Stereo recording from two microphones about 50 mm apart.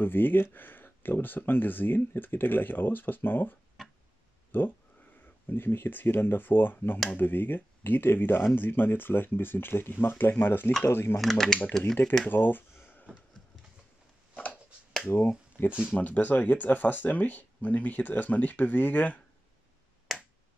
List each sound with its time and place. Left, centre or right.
0.0 s speech: left
11.1 s speech: centre
12.3 s a sound: left
14.3 s a sound: left
15.1 s speech: left
20.1 s finger snapping: centre